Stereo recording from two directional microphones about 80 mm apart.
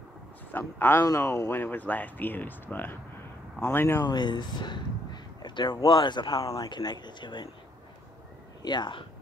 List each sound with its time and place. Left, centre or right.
0.5 s speech: left
1.0 s speech: left
1.5 s speech: left
4.0 s speech: left
5.9 s speech: left
6.3 s speech: left
6.7 s speech: left
8.6 s speech: left